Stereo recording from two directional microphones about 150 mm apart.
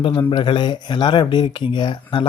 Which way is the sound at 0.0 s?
35° left (ahead or behind).